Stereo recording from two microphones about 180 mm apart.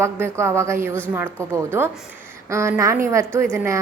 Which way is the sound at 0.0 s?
15° right (ahead or behind).